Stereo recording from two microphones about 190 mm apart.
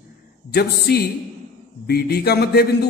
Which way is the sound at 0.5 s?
55° left (ahead or behind).